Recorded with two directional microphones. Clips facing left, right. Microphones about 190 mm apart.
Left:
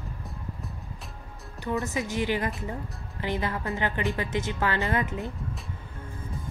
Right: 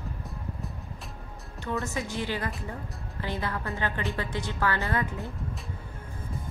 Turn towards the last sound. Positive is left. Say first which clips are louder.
# left 2 dB
turn(degrees=20)  # may be behind; listen again after turning